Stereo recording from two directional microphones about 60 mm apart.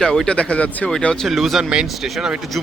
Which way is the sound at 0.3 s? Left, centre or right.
Centre.